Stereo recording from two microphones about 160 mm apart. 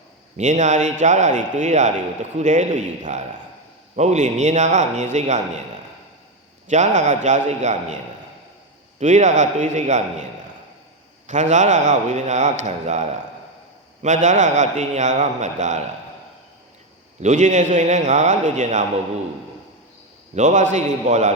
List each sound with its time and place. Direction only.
0.3 s a man's voice: 50° right (ahead or behind)
6.7 s a man's voice: 50° right (ahead or behind)
11.3 s a man's voice: 50° right (ahead or behind)
17.2 s a man's voice: 50° right (ahead or behind)
20.3 s a man's voice: 50° right (ahead or behind)